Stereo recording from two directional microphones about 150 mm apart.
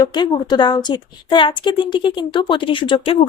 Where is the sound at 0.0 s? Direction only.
30° left (ahead or behind).